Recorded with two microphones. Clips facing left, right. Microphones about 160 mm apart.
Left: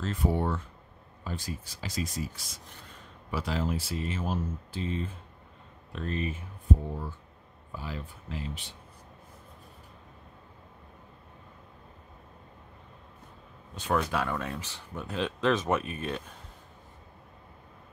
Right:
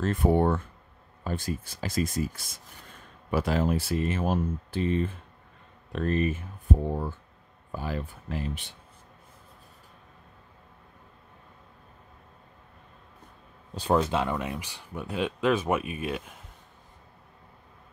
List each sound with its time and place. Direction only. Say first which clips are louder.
0.0 s speech: right 6 dB; 55° right (ahead or behind)
7.7 s speech: right 6 dB; 50° right (ahead or behind)
13.7 s speech: right 4 dB; 30° right (ahead or behind); by 16.3 s 10° right (ahead or behind)